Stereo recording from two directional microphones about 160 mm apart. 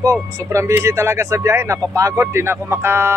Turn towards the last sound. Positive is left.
turn(degrees=-15)  # may be behind; listen again after turning